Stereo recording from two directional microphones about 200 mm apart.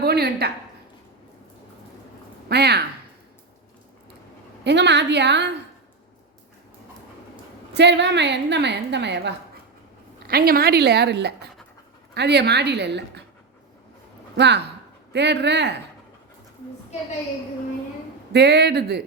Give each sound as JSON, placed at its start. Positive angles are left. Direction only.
{"t": 0.0, "sound": "speech", "side_deg": -50}
{"t": 2.5, "sound": "a woman's voice", "side_deg": -55}
{"t": 4.6, "sound": "a woman's voice", "side_deg": -60}
{"t": 7.7, "sound": "a woman's voice", "side_deg": -60}
{"t": 10.2, "sound": "a woman's voice", "side_deg": -50}
{"t": 14.3, "sound": "a woman's voice", "side_deg": -60}
{"t": 18.3, "sound": "a woman's voice", "side_deg": -55}